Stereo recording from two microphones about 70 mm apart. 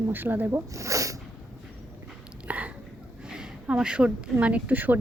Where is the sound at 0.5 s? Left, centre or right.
Right.